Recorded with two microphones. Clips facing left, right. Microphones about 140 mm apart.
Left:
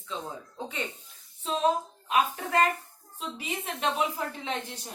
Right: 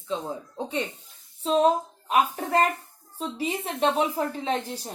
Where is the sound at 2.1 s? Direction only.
35° right (ahead or behind).